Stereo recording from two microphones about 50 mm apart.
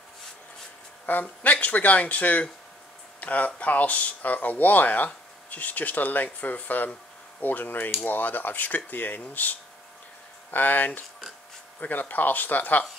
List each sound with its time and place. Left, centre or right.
1.0 s speech: left